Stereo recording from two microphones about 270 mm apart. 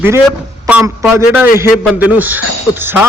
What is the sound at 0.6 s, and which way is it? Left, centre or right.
A man's voice, centre.